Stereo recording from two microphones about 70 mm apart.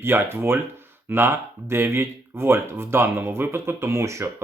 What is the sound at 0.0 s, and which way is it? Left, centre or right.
Speech, right.